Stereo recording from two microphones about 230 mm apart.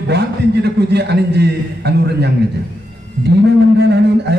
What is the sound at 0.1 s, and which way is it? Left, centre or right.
A man's voice, right.